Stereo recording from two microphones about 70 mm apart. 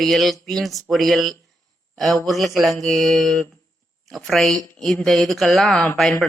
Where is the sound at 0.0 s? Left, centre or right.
Centre.